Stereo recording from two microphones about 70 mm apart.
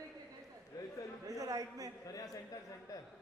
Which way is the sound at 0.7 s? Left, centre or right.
Left.